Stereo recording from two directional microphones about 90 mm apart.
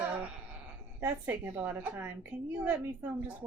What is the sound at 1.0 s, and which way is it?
A woman's voice, 20° right (ahead or behind).